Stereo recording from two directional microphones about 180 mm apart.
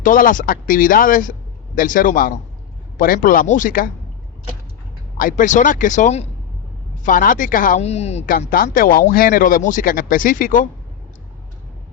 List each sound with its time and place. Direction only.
0.0 s speech: 50° left (ahead or behind)
5.1 s speech: 50° left (ahead or behind)
8.4 s speech: 55° left (ahead or behind)